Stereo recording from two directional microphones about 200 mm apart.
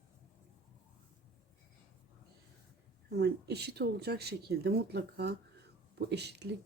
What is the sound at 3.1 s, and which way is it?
Speech, 55° right (ahead or behind).